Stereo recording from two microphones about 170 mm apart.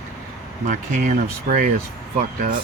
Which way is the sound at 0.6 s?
50° right (ahead or behind).